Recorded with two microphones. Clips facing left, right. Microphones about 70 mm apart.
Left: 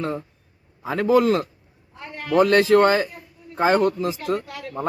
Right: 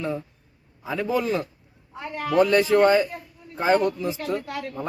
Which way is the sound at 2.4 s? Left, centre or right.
Left.